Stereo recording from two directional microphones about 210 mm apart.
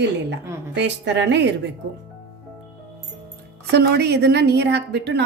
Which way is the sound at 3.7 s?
50° right (ahead or behind).